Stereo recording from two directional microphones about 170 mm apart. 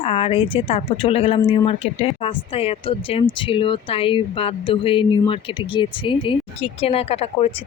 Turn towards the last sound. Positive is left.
turn(degrees=35)  # may be behind; listen again after turning